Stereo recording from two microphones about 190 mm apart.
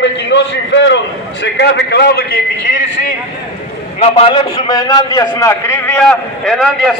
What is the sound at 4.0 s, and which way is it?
A man's voice, 30° left (ahead or behind).